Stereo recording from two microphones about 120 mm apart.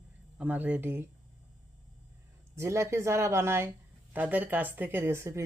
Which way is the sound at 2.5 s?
25° right (ahead or behind).